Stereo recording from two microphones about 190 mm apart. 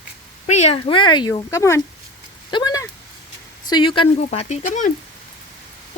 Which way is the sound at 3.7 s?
25° left (ahead or behind).